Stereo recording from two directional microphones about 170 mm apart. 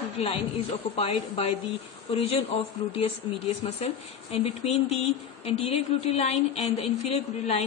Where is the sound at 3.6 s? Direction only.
35° left (ahead or behind).